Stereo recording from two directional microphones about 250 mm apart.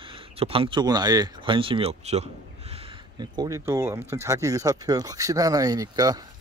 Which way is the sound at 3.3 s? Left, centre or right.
Centre.